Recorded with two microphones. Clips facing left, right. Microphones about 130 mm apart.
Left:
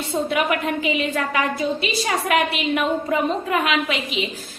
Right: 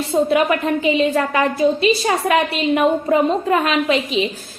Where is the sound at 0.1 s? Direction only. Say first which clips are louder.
Right 5 dB; 30° right (ahead or behind).